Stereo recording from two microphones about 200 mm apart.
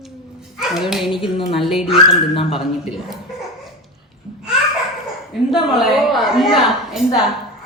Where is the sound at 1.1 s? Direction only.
25° left (ahead or behind).